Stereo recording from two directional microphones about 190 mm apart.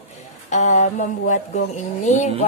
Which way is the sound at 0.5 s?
40° left (ahead or behind).